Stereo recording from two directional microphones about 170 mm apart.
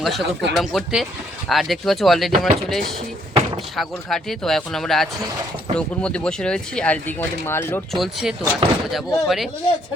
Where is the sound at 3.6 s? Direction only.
Centre (ahead or behind).